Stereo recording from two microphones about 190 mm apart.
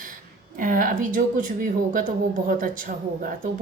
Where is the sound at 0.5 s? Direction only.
45° right (ahead or behind).